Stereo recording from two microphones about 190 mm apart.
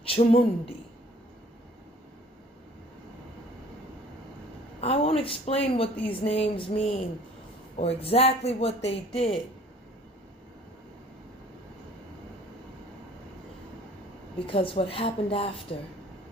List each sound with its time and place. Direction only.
0.1 s a woman's voice: 30° left (ahead or behind)
4.8 s a man's voice: 30° left (ahead or behind)
14.3 s a woman's voice: 30° left (ahead or behind)